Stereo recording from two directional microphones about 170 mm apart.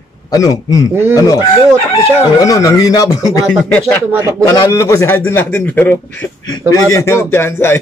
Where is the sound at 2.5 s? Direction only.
20° left (ahead or behind).